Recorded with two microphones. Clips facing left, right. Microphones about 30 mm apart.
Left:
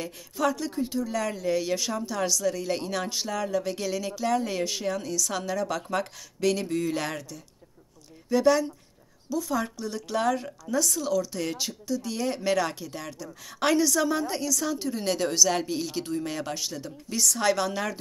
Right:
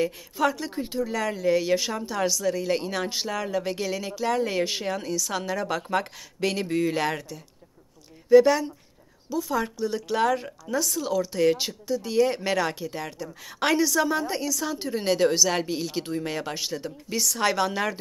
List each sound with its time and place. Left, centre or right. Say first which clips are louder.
0.0 s speech: right 3 dB; centre